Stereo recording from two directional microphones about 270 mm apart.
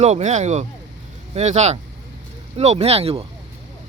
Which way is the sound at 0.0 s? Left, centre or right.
Right.